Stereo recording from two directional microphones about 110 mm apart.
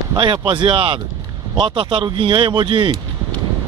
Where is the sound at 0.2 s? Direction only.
45° right (ahead or behind).